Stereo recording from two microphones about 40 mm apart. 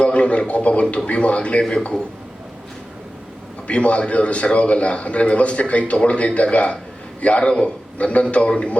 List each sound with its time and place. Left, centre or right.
0.0 s a man's voice: left
3.7 s a man's voice: left